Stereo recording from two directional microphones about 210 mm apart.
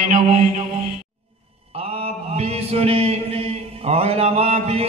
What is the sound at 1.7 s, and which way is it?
Mantra, 30° right (ahead or behind).